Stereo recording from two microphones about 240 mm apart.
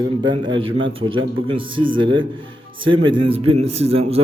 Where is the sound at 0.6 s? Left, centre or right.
Right.